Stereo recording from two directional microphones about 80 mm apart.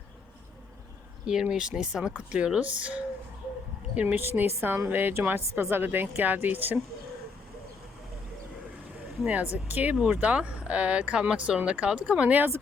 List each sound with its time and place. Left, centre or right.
1.3 s a woman's voice: centre; by 6.7 s right
9.2 s speech: centre